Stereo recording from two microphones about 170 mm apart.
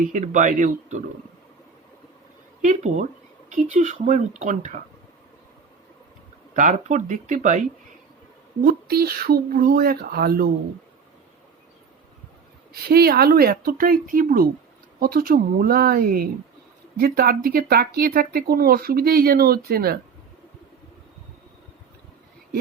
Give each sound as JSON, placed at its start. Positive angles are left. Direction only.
{"t": 0.1, "sound": "speech", "side_deg": -45}
{"t": 2.6, "sound": "speech", "side_deg": -45}
{"t": 6.6, "sound": "speech", "side_deg": -45}
{"t": 8.6, "sound": "speech", "side_deg": -65}
{"t": 12.7, "sound": "speech", "side_deg": -65}